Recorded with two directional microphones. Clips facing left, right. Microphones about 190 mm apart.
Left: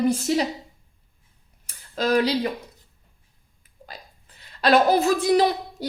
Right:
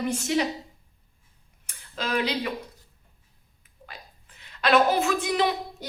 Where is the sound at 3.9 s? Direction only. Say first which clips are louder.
Left 3 dB; 35° left (ahead or behind).